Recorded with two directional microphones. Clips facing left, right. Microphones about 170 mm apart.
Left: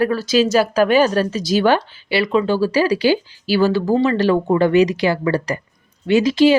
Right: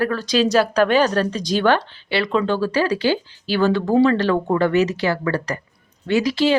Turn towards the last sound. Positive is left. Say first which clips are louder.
# left 5 dB
turn(degrees=15)  # may be behind; listen again after turning